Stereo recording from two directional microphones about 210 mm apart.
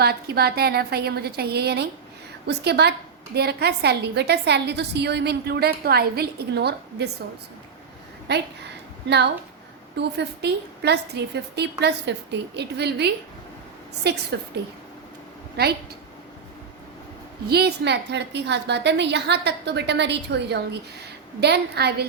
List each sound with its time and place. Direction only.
0.0 s a woman's voice: 50° right (ahead or behind)
8.3 s a woman's voice: 55° right (ahead or behind)
17.5 s a woman's voice: 50° right (ahead or behind)